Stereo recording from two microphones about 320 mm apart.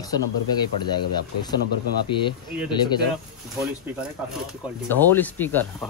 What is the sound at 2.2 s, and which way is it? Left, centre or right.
Speech, centre.